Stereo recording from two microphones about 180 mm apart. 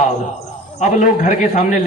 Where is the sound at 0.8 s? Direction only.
40° left (ahead or behind).